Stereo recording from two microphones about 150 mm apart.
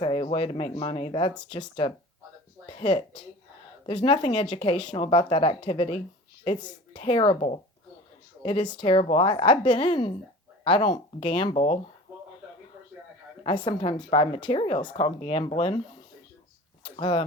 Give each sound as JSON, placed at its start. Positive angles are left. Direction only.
{"t": 0.0, "sound": "speech", "side_deg": 35}
{"t": 13.4, "sound": "speech", "side_deg": 30}
{"t": 16.8, "sound": "a sound", "side_deg": 30}